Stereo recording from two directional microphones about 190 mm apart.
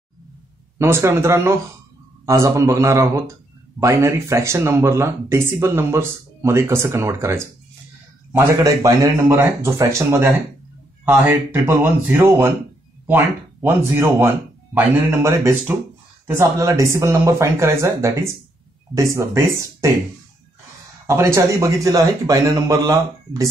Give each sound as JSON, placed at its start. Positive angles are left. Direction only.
{"t": 0.7, "sound": "speech", "side_deg": -15}
{"t": 21.1, "sound": "speech", "side_deg": -15}